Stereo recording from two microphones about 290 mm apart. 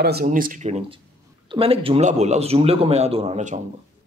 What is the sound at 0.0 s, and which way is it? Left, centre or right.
A man's voice, right.